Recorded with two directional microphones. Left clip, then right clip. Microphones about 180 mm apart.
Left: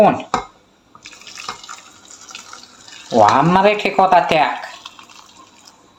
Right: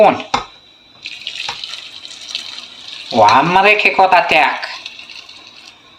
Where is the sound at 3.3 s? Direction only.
45° left (ahead or behind).